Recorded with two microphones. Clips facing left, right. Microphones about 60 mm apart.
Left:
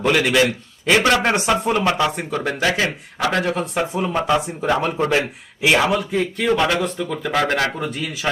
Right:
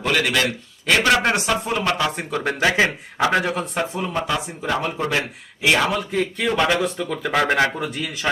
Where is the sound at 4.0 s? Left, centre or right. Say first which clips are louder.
Left 4 dB; centre.